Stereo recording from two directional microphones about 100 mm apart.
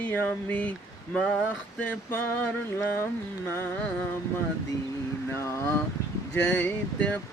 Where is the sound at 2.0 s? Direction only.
20° left (ahead or behind).